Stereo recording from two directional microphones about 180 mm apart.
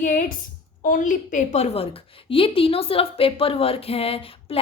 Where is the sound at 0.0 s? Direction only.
50° left (ahead or behind).